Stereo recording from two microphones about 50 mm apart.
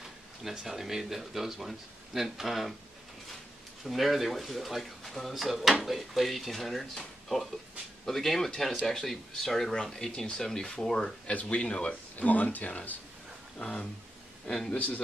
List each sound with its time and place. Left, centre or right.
0.4 s speech: centre
3.8 s speech: centre; by 12.9 s left
13.6 s speech: centre
14.7 s speech: left